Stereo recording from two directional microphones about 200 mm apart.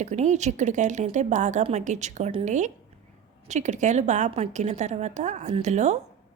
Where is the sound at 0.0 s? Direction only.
35° right (ahead or behind).